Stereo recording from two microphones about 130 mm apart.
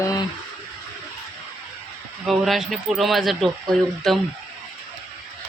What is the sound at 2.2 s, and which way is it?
Speech, centre (ahead or behind).